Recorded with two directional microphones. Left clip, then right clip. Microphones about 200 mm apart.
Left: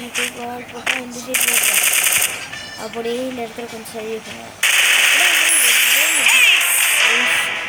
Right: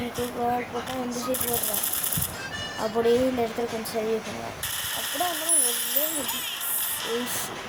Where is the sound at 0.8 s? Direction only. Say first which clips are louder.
Left 7 dB; 65° left (ahead or behind).